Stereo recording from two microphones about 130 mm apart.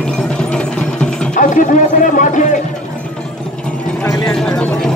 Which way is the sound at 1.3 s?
80° left.